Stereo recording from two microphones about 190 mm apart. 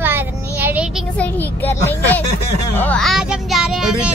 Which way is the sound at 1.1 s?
10° left (ahead or behind).